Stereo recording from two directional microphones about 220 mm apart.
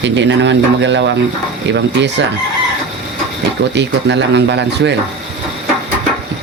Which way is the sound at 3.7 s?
50° right (ahead or behind).